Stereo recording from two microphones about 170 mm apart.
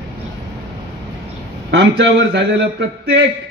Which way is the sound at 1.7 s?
90° right.